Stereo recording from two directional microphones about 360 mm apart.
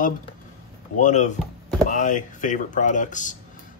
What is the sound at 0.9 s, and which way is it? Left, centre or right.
Speech, centre.